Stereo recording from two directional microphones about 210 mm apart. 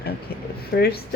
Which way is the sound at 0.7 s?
50° left (ahead or behind).